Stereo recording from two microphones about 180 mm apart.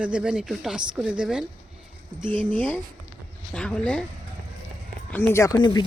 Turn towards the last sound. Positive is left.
turn(degrees=20)  # may be behind; listen again after turning